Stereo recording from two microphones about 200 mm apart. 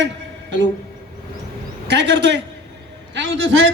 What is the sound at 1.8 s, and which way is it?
Speech, 60° right (ahead or behind).